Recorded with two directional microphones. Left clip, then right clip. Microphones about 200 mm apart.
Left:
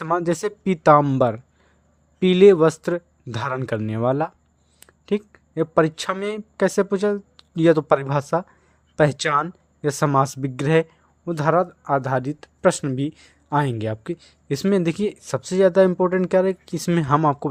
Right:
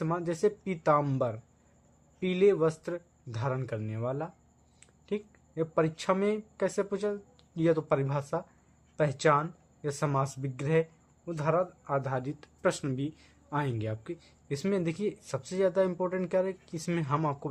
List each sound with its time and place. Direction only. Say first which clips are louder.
0.0 s speech: left 7 dB; 40° left (ahead or behind)